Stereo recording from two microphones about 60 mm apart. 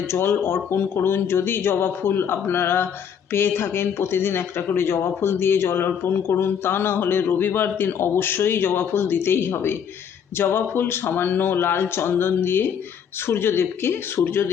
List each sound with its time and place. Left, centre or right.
0.1 s speech: left